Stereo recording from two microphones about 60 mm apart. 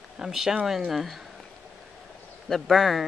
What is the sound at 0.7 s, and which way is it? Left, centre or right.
Speech, centre.